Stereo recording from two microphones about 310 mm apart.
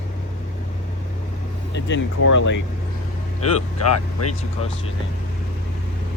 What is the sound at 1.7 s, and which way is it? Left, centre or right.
Speech, left.